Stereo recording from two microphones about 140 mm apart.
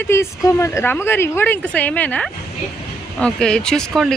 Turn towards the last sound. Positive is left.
turn(degrees=5)  # may be behind; listen again after turning